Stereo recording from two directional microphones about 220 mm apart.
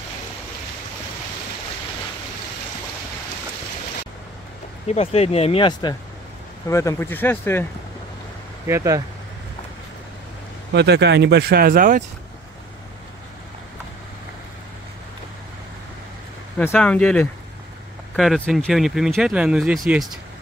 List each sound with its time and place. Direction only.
4.8 s speech: 30° left (ahead or behind); by 7.6 s 10° left (ahead or behind)
8.6 s speech: 15° right (ahead or behind)
10.7 s speech: 50° right (ahead or behind)
16.5 s speech: 5° left (ahead or behind)